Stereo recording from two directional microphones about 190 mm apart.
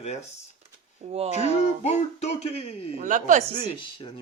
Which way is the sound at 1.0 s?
35° right (ahead or behind).